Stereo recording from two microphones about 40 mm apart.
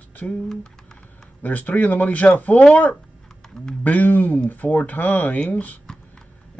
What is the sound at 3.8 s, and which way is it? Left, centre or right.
Speech, left.